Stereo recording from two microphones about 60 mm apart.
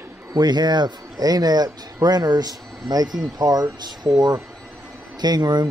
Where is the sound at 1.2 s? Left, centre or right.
Right.